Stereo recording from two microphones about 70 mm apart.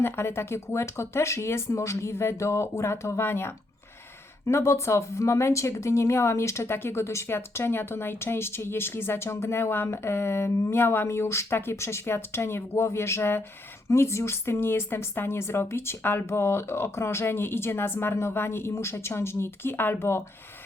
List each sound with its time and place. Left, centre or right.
0.0 s speech: left